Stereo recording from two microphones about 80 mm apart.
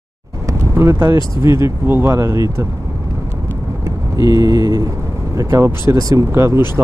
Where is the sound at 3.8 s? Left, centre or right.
Right.